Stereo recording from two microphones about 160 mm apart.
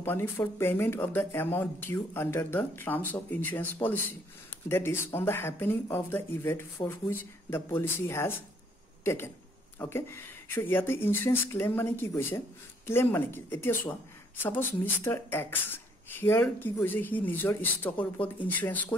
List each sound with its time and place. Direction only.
0.0 s speech: 15° left (ahead or behind)